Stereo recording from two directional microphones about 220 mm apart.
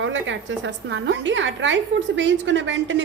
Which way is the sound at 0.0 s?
55° right (ahead or behind).